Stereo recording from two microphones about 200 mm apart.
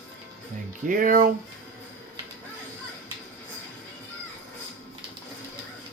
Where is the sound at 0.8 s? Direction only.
40° right (ahead or behind).